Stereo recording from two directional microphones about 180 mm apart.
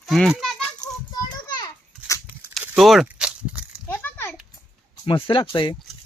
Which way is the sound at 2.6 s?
5° right (ahead or behind).